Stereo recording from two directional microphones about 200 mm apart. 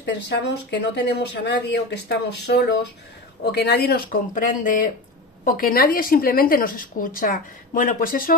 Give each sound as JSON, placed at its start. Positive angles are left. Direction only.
{"t": 0.0, "sound": "speech", "side_deg": 60}